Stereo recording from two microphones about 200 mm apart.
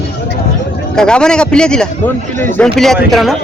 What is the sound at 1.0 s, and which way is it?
Speech, 5° left (ahead or behind).